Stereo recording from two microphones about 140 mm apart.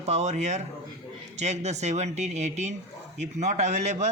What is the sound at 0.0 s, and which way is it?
A man's voice, 55° right (ahead or behind).